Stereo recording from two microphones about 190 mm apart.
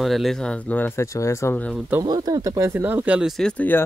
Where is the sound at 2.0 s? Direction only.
20° right (ahead or behind); by 3.9 s 10° left (ahead or behind).